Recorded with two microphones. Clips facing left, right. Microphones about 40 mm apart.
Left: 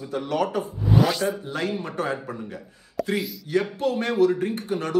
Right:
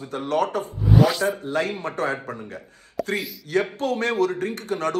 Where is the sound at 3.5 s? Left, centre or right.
Right.